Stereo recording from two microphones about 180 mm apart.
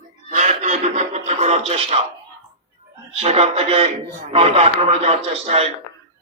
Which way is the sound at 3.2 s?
35° right (ahead or behind).